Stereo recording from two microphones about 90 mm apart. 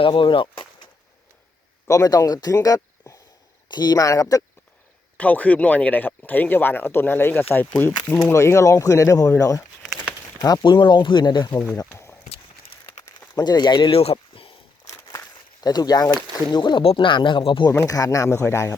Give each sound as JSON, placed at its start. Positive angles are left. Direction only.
{"t": 0.0, "sound": "speech", "side_deg": 65}
{"t": 1.9, "sound": "speech", "side_deg": 40}
{"t": 3.7, "sound": "speech", "side_deg": 50}
{"t": 5.1, "sound": "speech", "side_deg": 15}
{"t": 10.7, "sound": "speech", "side_deg": 60}
{"t": 13.3, "sound": "speech", "side_deg": 50}
{"t": 13.9, "sound": "a sound", "side_deg": 90}
{"t": 14.8, "sound": "a sound", "side_deg": 35}
{"t": 16.5, "sound": "speech", "side_deg": 60}
{"t": 17.7, "sound": "speech", "side_deg": 35}